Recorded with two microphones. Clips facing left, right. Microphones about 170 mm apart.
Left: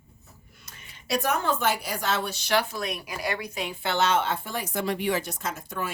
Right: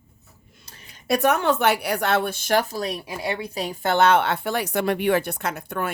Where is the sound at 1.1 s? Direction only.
70° right (ahead or behind).